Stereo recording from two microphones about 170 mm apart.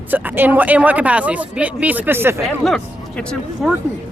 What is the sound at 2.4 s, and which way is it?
Speech, centre (ahead or behind).